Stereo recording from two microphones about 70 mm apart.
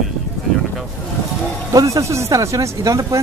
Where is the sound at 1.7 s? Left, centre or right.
Right.